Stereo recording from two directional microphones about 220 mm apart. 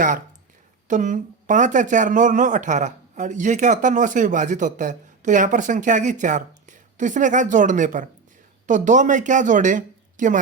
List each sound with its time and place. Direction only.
0.9 s speech: 35° right (ahead or behind)